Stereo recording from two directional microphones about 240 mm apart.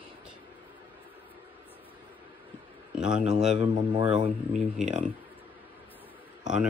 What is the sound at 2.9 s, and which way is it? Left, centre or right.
Speech, centre.